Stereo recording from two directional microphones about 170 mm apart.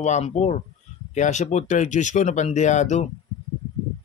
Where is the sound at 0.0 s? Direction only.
45° left (ahead or behind).